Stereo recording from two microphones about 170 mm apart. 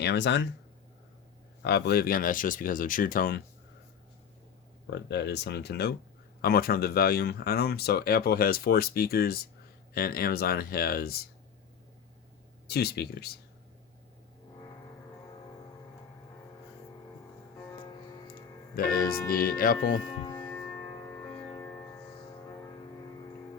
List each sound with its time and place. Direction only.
0.0 s speech: 90° left
1.6 s speech: 75° left (ahead or behind); by 3.4 s 55° left (ahead or behind)
4.9 s speech: 85° left
6.4 s speech: 65° left (ahead or behind)
12.6 s speech: 70° left (ahead or behind)
18.8 s speech: 60° left (ahead or behind)
20.2 s music: 20° left (ahead or behind)